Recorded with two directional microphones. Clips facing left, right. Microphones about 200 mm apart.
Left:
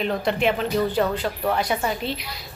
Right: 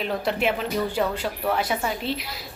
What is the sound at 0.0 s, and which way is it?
A woman's voice, 5° right (ahead or behind).